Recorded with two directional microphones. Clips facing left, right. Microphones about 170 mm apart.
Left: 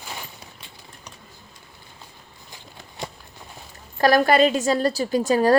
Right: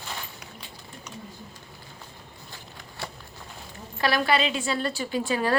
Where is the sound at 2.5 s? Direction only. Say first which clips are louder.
Left 3 dB; 20° left (ahead or behind).